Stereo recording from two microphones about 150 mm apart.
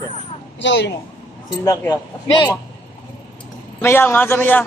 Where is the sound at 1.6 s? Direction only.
20° left (ahead or behind).